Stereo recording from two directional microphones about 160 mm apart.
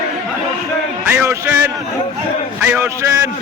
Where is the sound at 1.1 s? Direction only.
15° right (ahead or behind).